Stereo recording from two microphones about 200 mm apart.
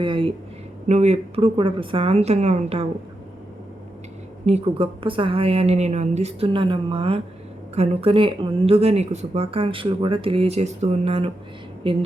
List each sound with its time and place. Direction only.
0.0 s a sound: 25° right (ahead or behind)
0.9 s a woman's voice: 35° right (ahead or behind)
4.4 s speech: 30° right (ahead or behind)